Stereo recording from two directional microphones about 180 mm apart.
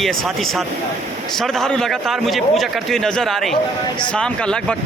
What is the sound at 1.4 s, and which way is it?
A man's voice, 5° left (ahead or behind).